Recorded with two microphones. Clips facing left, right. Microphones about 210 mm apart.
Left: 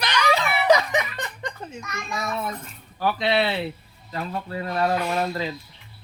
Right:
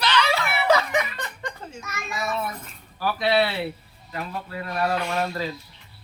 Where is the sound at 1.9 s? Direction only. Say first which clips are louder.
Left 1 dB; 5° right (ahead or behind).